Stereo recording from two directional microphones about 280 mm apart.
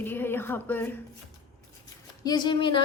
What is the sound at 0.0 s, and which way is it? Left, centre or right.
Speech, centre.